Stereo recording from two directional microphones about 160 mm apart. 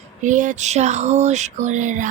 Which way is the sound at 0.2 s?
50° right (ahead or behind).